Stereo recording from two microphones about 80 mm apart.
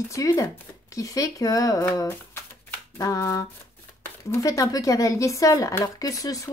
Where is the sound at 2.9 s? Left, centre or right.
Left.